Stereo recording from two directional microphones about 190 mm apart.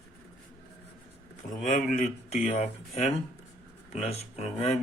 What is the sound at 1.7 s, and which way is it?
Speech, 35° left (ahead or behind).